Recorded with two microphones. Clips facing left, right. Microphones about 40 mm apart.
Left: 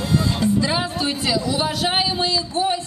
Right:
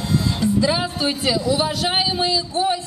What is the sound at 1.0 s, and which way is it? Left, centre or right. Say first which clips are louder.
Speech: right 1 dB; centre.